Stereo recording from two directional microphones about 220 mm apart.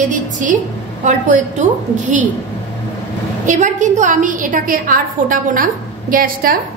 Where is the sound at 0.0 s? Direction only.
35° right (ahead or behind).